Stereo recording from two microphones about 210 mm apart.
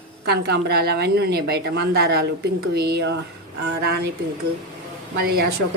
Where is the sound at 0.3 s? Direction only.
50° right (ahead or behind).